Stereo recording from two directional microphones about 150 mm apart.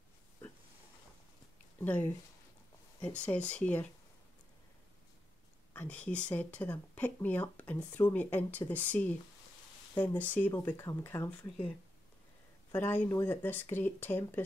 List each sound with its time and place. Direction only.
1.8 s speech: 10° left (ahead or behind)
5.7 s speech: 10° left (ahead or behind)
12.7 s speech: 15° left (ahead or behind)